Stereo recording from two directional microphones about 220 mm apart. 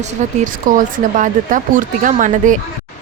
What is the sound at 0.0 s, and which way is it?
Speech, 35° right (ahead or behind).